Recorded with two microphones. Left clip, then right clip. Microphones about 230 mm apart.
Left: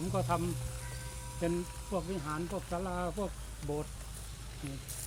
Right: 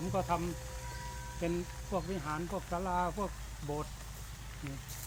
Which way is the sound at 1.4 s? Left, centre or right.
Left.